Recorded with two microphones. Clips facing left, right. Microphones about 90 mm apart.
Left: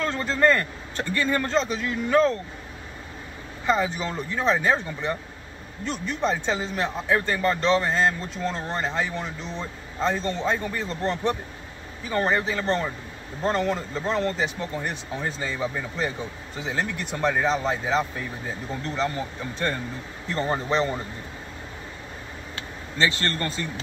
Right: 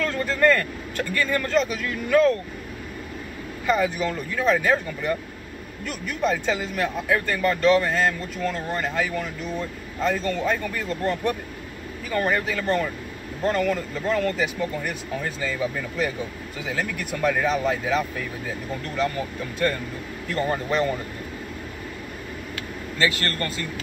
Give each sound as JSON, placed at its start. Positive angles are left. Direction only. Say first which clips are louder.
{"t": 0.0, "sound": "speech", "louder": "right 1 dB", "side_deg": 30}
{"t": 3.6, "sound": "speech", "louder": "right 2 dB", "side_deg": 30}
{"t": 22.6, "sound": "speech", "louder": "even", "side_deg": 30}